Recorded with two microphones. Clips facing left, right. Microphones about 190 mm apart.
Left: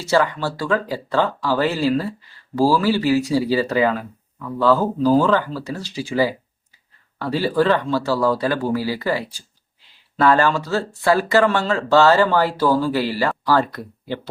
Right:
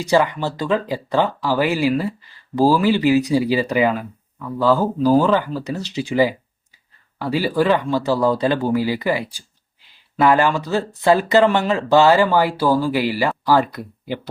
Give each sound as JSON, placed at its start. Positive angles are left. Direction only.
{"t": 0.0, "sound": "speech", "side_deg": -15}